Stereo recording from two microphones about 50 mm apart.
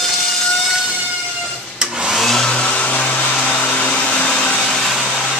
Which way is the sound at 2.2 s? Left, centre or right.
Centre.